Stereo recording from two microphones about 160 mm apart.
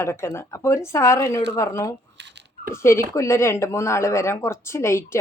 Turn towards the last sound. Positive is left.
turn(degrees=15)  # may be behind; listen again after turning